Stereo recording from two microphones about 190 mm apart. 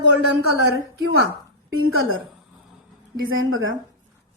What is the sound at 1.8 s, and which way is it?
Speech, 90° right.